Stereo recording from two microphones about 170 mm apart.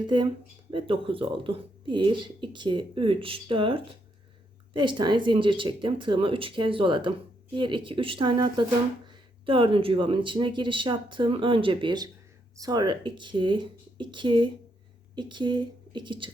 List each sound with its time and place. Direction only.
0.1 s a woman's voice: 25° right (ahead or behind)